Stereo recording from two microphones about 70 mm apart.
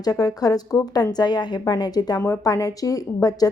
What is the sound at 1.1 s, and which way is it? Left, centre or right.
Speech, left.